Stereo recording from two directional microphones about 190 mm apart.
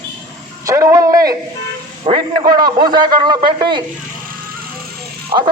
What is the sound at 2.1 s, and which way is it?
A man's voice, 30° right (ahead or behind).